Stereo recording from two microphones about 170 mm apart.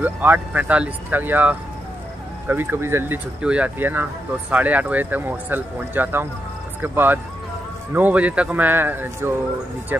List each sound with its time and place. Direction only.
0.0 s speech: 10° right (ahead or behind)